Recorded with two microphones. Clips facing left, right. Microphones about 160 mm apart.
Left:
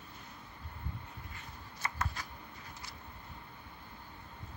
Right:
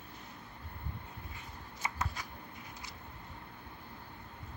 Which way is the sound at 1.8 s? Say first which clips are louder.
Even; 15° right (ahead or behind).